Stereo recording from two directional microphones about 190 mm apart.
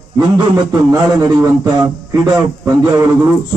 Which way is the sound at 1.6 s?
10° right (ahead or behind).